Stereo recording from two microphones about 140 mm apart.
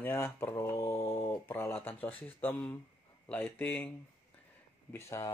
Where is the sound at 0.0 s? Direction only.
15° left (ahead or behind).